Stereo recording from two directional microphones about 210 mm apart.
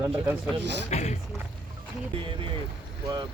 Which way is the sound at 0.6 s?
55° right (ahead or behind).